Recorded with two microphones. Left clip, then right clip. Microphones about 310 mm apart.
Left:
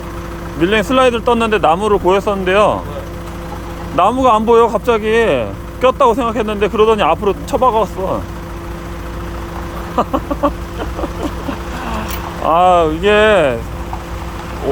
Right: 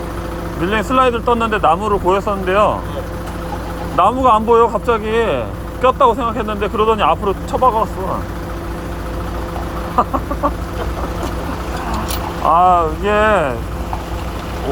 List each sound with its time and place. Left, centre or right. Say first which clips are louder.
0.6 s speech: left 3 dB; left
3.9 s speech: left 1 dB; left
10.0 s speech: left 1 dB; left
12.5 s speech: left 1 dB; left